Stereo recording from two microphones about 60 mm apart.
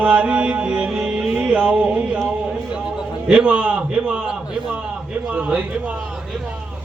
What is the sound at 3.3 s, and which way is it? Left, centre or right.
Chant, centre.